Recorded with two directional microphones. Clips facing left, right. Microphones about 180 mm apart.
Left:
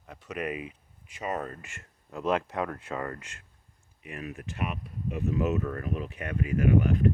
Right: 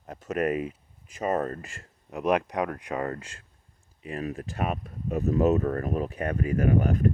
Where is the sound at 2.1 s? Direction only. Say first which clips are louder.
Right 3 dB; 15° right (ahead or behind).